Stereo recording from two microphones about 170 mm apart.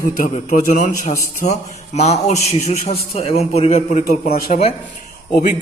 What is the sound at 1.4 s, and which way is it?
Mantra, 40° left (ahead or behind).